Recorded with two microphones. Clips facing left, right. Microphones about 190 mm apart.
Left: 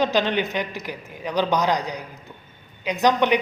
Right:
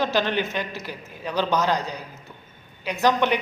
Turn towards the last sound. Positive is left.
turn(degrees=15)  # may be behind; listen again after turning